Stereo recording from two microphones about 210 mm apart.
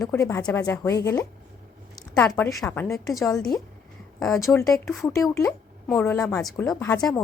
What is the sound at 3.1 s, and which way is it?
Speech, centre (ahead or behind).